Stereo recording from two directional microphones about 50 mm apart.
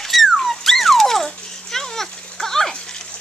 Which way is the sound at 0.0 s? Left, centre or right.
Centre.